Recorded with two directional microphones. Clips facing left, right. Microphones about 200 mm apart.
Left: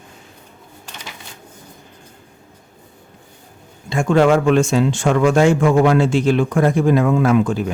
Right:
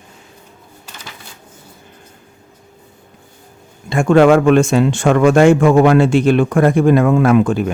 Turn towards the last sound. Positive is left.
turn(degrees=-60)  # may be behind; listen again after turning